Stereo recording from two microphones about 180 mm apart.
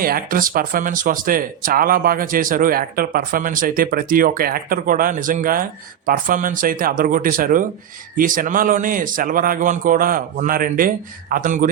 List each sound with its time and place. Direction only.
0.0 s speech: 50° right (ahead or behind)